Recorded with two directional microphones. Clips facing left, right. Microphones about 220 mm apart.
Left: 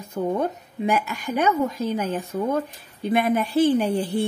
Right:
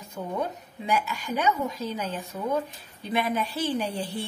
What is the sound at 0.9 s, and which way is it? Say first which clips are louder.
Speech: left 3 dB; 50° left (ahead or behind).